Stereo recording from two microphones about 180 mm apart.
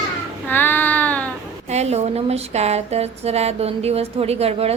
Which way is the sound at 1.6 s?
35° right (ahead or behind).